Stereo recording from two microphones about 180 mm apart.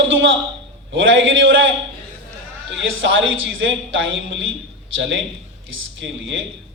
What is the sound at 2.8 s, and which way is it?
A man's voice, 90° right.